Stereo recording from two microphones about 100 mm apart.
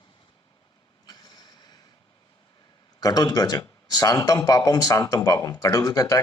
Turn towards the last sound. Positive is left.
turn(degrees=35)  # may be behind; listen again after turning